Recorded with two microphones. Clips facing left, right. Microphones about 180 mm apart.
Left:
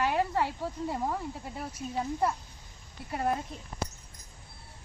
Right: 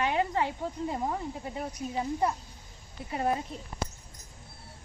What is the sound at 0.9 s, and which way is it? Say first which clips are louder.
Speech: even; 10° right (ahead or behind).